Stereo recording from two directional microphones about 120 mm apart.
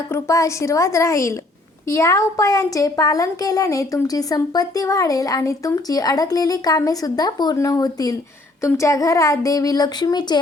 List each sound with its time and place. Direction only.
0.1 s a woman's voice: 25° left (ahead or behind)